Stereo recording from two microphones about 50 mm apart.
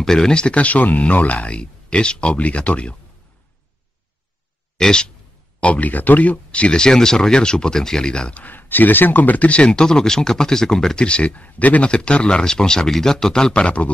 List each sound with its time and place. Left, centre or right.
0.0 s speech: centre
4.7 s speech: centre
5.6 s speech: left
8.5 s speech: left
11.9 s speech: centre